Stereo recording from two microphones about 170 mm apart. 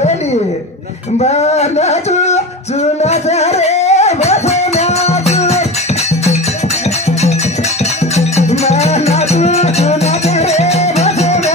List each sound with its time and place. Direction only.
1.2 s singing: 40° left (ahead or behind)
7.1 s music: 40° left (ahead or behind)